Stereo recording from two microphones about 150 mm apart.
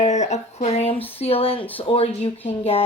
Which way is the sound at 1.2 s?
40° left (ahead or behind).